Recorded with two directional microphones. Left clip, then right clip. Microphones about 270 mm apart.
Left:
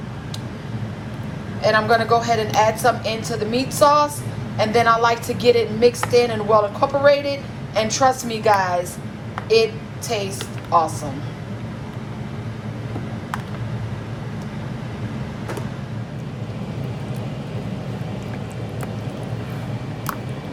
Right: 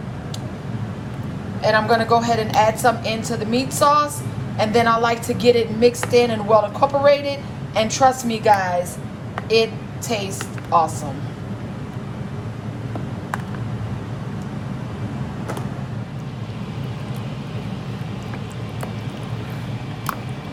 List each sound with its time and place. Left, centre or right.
1.6 s a woman's voice: centre